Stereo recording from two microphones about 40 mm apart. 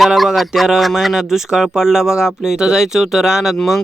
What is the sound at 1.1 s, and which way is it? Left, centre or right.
Speech, centre.